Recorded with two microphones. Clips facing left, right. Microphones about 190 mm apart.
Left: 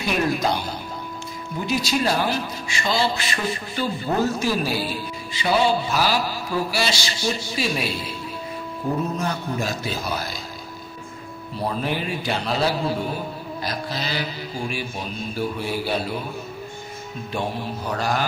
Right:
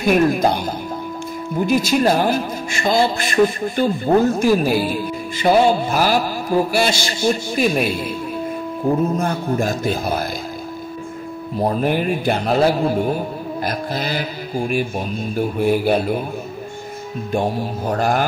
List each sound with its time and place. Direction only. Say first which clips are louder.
0.0 s a man's voice: right 7 dB; 50° right (ahead or behind)
11.5 s a man's voice: right 7 dB; 45° right (ahead or behind)
17.3 s a man's voice: right 7 dB; 50° right (ahead or behind)